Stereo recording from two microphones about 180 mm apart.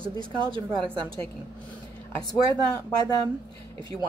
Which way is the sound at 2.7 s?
20° left (ahead or behind).